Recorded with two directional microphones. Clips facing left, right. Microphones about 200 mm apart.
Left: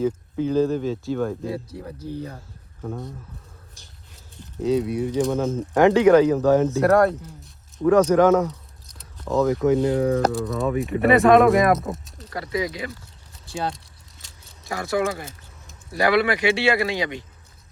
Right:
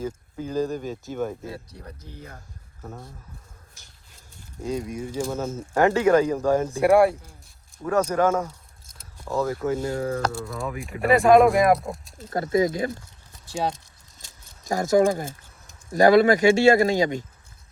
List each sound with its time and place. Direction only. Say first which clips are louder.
0.3 s speech: left 5 dB; 10° right (ahead or behind)
2.8 s speech: left 8 dB; 5° right (ahead or behind)
4.8 s speech: left 7 dB; 10° left (ahead or behind)
5.2 s speech: left 6 dB; 5° right (ahead or behind)
9.6 s speech: left 6 dB; 20° left (ahead or behind)
10.3 s speech: left 8 dB; centre (ahead or behind)
12.2 s speech: right 5 dB; 45° right (ahead or behind)
14.6 s speech: right 5 dB; 45° right (ahead or behind)